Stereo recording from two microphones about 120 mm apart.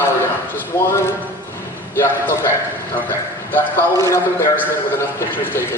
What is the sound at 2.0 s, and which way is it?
Speech, 20° left (ahead or behind).